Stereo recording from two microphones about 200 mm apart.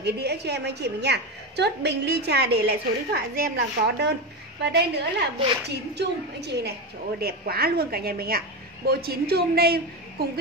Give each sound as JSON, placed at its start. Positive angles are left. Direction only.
{"t": 0.0, "sound": "a woman's voice", "side_deg": -55}